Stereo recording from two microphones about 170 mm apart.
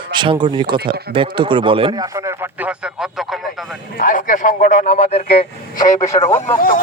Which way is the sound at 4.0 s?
55° left (ahead or behind).